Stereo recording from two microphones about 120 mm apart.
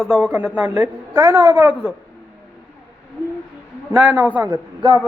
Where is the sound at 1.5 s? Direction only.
15° right (ahead or behind).